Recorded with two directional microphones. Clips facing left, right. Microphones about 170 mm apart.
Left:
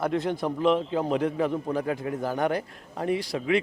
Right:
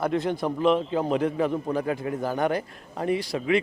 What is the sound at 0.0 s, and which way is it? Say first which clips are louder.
A man's voice: right 1 dB; 15° right (ahead or behind).